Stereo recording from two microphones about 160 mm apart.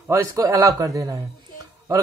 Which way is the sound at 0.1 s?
20° right (ahead or behind).